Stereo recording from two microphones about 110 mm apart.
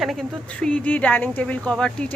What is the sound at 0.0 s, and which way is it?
A woman's voice, 5° left (ahead or behind).